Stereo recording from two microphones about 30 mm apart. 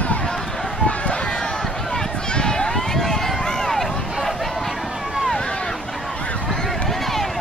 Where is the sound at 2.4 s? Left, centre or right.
Left.